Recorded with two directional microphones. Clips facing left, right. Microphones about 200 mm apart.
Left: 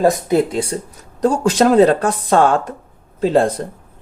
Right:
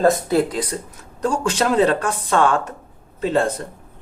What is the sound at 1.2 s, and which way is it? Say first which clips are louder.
Speech: left 6 dB; 40° left (ahead or behind).